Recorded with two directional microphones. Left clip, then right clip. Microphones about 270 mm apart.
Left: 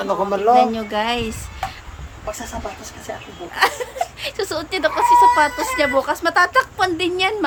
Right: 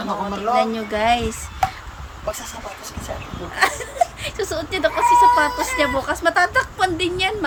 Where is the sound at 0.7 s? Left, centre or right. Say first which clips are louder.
Right 2 dB; centre.